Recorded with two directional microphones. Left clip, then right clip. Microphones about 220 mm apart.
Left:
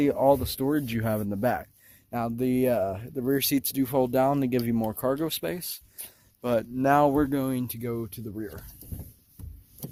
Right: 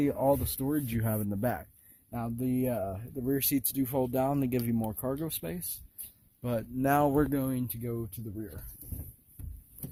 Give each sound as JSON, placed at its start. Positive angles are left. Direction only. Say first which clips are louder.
{"t": 0.0, "sound": "speech", "louder": "left 6 dB", "side_deg": 5}
{"t": 2.0, "sound": "speech", "louder": "left 7 dB", "side_deg": 20}
{"t": 4.8, "sound": "speech", "louder": "left 7 dB", "side_deg": 20}
{"t": 6.7, "sound": "speech", "louder": "left 4 dB", "side_deg": 0}
{"t": 7.8, "sound": "speech", "louder": "left 5 dB", "side_deg": 10}